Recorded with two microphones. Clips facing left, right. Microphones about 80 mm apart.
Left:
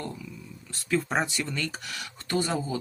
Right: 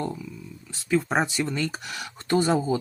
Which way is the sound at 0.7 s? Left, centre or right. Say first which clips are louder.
Right 3 dB; centre.